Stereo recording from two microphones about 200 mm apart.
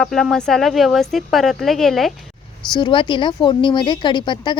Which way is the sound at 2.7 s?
25° left (ahead or behind).